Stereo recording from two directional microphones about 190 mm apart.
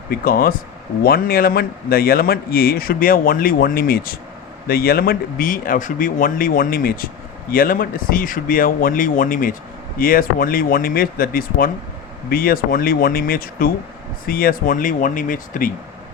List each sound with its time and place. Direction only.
0.1 s speech: 50° left (ahead or behind)